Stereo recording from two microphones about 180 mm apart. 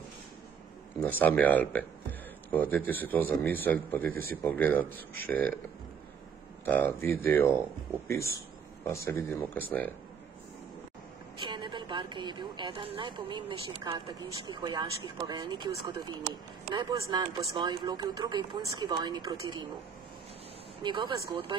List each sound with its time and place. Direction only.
1.0 s a man's voice: 10° left (ahead or behind)
6.6 s a man's voice: 10° left (ahead or behind)
8.8 s a man's voice: 15° left (ahead or behind)
11.4 s a woman's voice: 25° right (ahead or behind)
16.7 s a woman's voice: 20° right (ahead or behind)
20.8 s a woman's voice: 25° right (ahead or behind)